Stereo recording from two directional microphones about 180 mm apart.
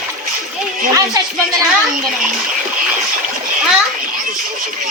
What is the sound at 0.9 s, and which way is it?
Speech, 20° right (ahead or behind).